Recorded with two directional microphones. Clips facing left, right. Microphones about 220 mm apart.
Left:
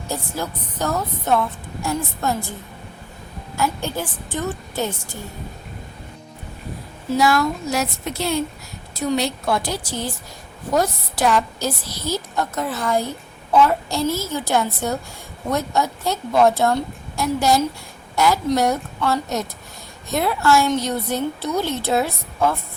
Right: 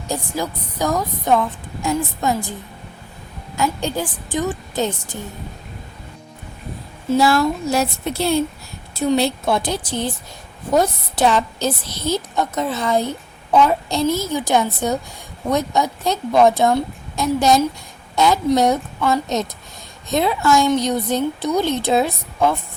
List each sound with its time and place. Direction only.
0.1 s a woman's voice: 15° right (ahead or behind)
3.6 s a woman's voice: 15° right (ahead or behind)
7.1 s a woman's voice: 30° right (ahead or behind)